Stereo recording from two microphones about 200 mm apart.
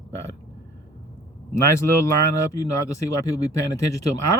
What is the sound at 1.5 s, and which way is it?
Speech, 15° left (ahead or behind).